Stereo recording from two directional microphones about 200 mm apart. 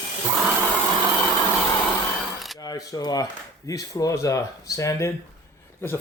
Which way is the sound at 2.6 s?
20° left (ahead or behind).